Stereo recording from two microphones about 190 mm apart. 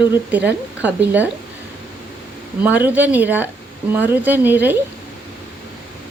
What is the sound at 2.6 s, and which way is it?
A woman's voice, 10° right (ahead or behind).